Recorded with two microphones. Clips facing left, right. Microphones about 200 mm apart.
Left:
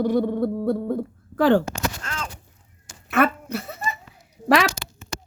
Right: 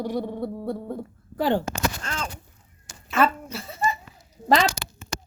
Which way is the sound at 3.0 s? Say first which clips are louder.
Left 2 dB; 60° left (ahead or behind).